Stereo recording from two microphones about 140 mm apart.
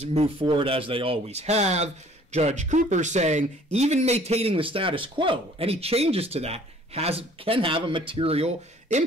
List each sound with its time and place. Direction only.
0.0 s speech: 45° right (ahead or behind)